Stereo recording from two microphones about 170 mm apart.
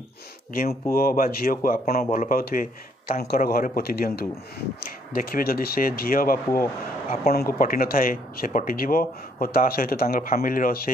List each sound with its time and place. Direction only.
0.9 s speech: 60° left (ahead or behind)